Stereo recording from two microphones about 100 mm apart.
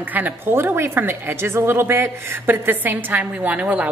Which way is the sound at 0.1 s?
20° right (ahead or behind).